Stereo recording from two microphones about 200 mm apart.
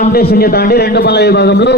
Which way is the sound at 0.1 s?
50° left (ahead or behind).